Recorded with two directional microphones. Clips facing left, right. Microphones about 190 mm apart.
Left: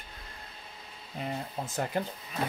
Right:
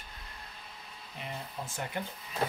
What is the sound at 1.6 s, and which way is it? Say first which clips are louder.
Speech: left 6 dB; 40° left (ahead or behind).